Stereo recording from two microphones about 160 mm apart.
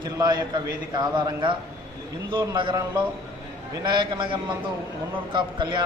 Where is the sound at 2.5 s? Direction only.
25° right (ahead or behind).